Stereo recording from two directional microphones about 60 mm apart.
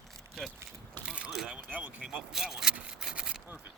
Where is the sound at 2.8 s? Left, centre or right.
Centre.